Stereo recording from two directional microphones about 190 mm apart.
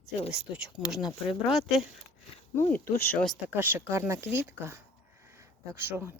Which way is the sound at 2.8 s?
50° left (ahead or behind).